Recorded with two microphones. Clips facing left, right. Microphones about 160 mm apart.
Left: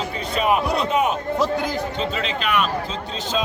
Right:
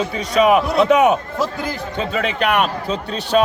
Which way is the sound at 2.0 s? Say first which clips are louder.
Right 4 dB; 55° right (ahead or behind).